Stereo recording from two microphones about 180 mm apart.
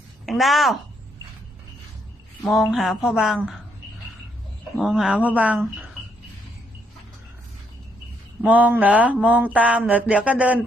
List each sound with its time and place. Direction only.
0.3 s a woman's voice: centre (ahead or behind)
2.4 s a woman's voice: centre (ahead or behind)
4.8 s mantra: centre (ahead or behind)
8.4 s mantra: 10° right (ahead or behind)